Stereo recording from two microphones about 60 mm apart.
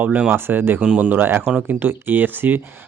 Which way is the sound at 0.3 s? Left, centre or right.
Right.